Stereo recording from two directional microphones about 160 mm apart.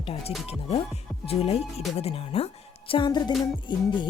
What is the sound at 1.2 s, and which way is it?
Speech, 40° left (ahead or behind).